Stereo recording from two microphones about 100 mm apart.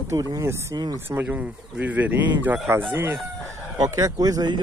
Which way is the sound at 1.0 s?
20° right (ahead or behind).